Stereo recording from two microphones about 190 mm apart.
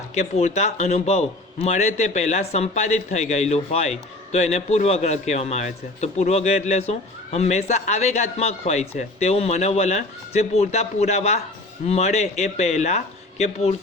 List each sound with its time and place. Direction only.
0.1 s a man's voice: 35° left (ahead or behind)